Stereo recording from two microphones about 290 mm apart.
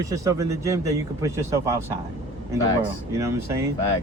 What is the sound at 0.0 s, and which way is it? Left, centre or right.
Speech, centre.